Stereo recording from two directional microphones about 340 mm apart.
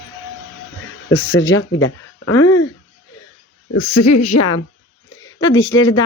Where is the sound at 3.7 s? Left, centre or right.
Left.